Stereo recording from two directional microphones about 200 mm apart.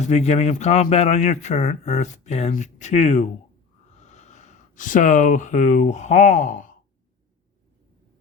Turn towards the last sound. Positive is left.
turn(degrees=40)  # may be behind; listen again after turning